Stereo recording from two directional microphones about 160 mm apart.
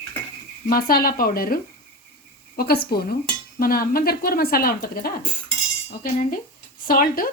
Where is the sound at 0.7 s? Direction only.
65° left (ahead or behind).